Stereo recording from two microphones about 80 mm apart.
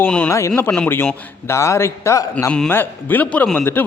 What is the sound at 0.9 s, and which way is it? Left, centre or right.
A man's voice, left.